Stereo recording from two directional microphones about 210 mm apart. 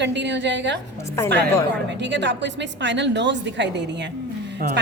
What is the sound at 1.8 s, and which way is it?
A woman's voice, 55° right (ahead or behind).